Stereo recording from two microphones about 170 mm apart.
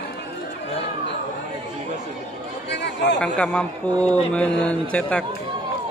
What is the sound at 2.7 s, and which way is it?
Chatter, 90° left.